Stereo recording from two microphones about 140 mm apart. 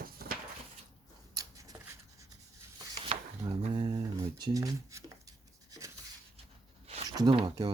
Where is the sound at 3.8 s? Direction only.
30° right (ahead or behind).